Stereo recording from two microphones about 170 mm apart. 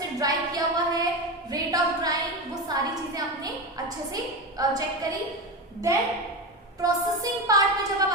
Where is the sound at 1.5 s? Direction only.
20° right (ahead or behind).